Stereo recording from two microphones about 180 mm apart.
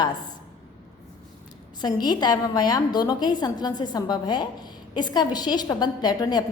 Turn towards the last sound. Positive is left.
turn(degrees=20)  # may be behind; listen again after turning